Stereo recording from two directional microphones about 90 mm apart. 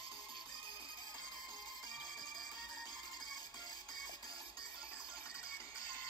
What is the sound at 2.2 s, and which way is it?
Music, centre (ahead or behind).